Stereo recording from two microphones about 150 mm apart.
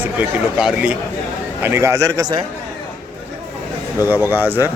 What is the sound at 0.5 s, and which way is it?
Speech, 5° right (ahead or behind).